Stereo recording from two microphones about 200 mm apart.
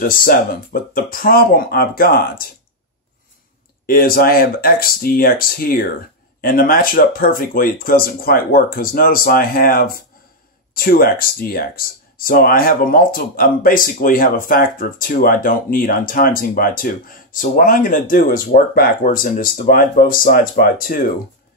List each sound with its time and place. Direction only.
0.0 s speech: 45° left (ahead or behind)
3.8 s speech: 45° left (ahead or behind)